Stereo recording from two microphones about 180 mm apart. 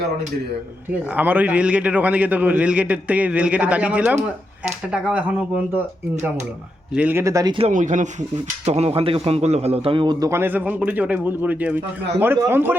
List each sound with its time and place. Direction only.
1.1 s a man's voice: 10° right (ahead or behind)
6.9 s a man's voice: 10° right (ahead or behind); by 7.7 s 25° right (ahead or behind)
7.7 s a man's voice: 45° right (ahead or behind); by 12.7 s 10° right (ahead or behind)